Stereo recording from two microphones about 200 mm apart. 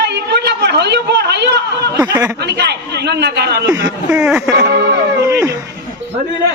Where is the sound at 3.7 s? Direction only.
15° right (ahead or behind).